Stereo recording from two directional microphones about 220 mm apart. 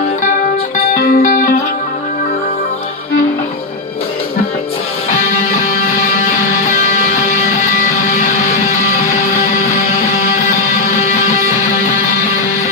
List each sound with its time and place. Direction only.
0.7 s music: 40° left (ahead or behind)
6.7 s music: 35° left (ahead or behind)